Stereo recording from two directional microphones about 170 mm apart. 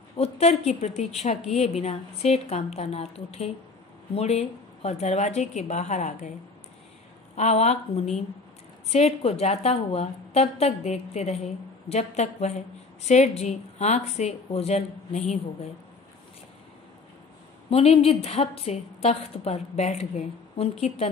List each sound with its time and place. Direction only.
0.2 s a woman's voice: 40° left (ahead or behind)
7.3 s a woman's voice: 40° left (ahead or behind)
17.6 s a woman's voice: 35° left (ahead or behind)